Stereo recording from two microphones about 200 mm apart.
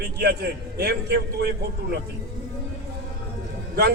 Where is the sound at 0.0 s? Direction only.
55° right (ahead or behind).